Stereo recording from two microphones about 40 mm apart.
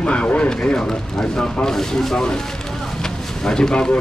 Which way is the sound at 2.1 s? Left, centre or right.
Left.